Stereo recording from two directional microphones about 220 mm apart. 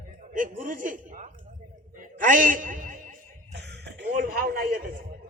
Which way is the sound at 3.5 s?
50° right (ahead or behind).